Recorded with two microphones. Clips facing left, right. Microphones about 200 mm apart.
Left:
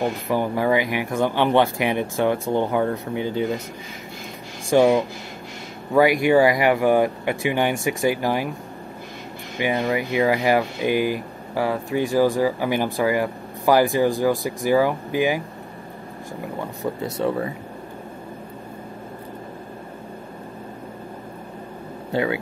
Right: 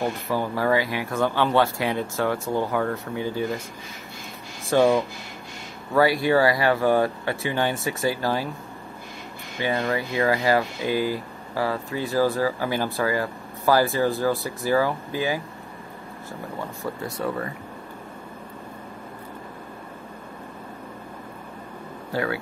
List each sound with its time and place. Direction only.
0.3 s speech: 15° left (ahead or behind)
4.6 s speech: 15° left (ahead or behind)
9.6 s speech: 15° left (ahead or behind)
16.8 s speech: 20° left (ahead or behind)
22.1 s speech: 20° left (ahead or behind)